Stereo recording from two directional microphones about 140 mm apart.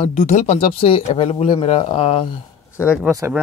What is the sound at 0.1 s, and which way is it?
Speech, 60° left (ahead or behind).